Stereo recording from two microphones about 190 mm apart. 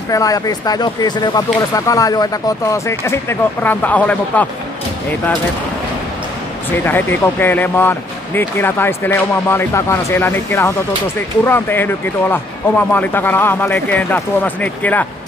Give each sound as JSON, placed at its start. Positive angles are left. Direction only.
{"t": 0.1, "sound": "speech", "side_deg": 20}
{"t": 6.8, "sound": "speech", "side_deg": 10}